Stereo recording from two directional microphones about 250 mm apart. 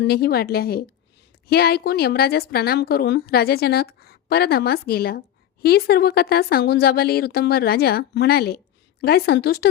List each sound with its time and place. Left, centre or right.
0.0 s speech: left